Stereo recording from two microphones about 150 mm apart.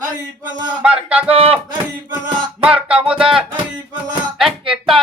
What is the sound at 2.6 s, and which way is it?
Music, 5° right (ahead or behind).